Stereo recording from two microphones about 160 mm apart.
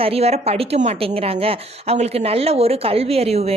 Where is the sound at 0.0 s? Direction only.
40° right (ahead or behind).